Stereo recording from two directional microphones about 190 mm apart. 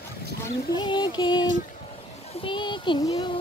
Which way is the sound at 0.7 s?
25° left (ahead or behind).